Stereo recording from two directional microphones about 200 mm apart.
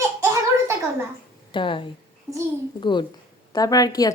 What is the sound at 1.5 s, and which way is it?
A woman's voice, 25° left (ahead or behind).